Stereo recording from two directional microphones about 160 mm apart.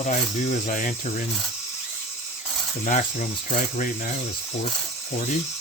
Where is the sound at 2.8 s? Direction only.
55° left (ahead or behind).